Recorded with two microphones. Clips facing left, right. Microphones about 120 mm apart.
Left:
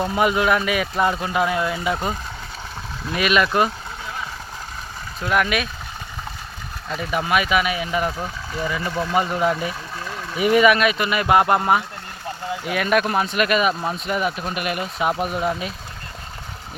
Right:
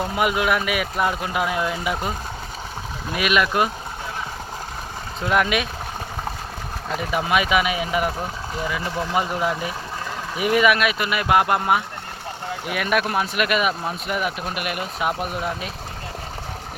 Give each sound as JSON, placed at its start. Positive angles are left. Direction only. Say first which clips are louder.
{"t": 0.0, "sound": "speech", "louder": "left 2 dB", "side_deg": -5}
{"t": 3.2, "sound": "speech", "louder": "left 2 dB", "side_deg": -5}
{"t": 5.2, "sound": "speech", "louder": "even", "side_deg": -20}
{"t": 6.9, "sound": "speech", "louder": "even", "side_deg": -15}